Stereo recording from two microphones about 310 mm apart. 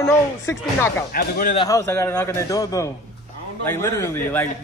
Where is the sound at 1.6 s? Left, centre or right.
Centre.